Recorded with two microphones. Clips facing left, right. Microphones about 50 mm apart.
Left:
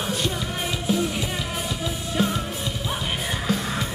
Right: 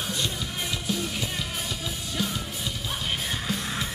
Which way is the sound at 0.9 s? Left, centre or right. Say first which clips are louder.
Left 7 dB; centre.